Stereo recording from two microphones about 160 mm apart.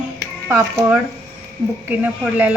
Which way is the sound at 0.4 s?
20° right (ahead or behind).